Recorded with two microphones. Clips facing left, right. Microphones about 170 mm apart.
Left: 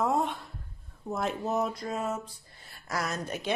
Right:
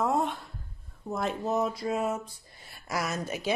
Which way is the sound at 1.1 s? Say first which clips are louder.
Right 1 dB; centre (ahead or behind).